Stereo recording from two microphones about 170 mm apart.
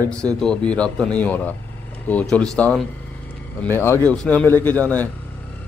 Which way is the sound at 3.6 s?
15° left (ahead or behind).